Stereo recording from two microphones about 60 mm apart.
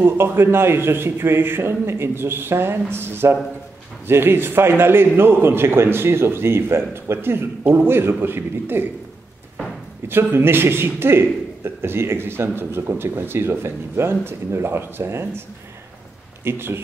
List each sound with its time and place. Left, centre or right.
0.0 s a man's voice: right
10.0 s a man's voice: right
16.4 s speech: right